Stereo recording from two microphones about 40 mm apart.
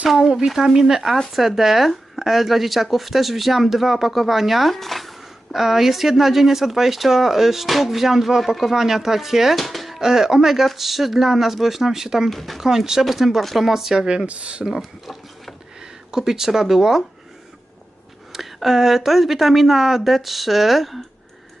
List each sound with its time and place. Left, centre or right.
0.3 s speech: centre
12.3 s speech: centre
12.6 s speech: centre
14.3 s speech: right
14.7 s speech: centre
15.8 s speech: centre
18.3 s speech: centre